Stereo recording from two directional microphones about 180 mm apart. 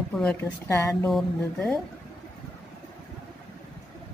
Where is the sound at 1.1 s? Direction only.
Centre (ahead or behind).